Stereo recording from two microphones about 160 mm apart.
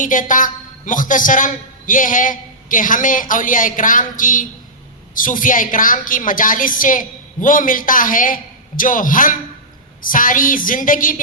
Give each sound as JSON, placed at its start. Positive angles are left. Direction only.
{"t": 0.0, "sound": "a man's voice", "side_deg": 55}